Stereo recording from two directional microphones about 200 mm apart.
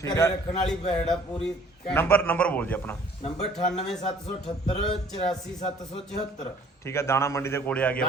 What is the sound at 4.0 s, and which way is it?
Music, 30° left (ahead or behind).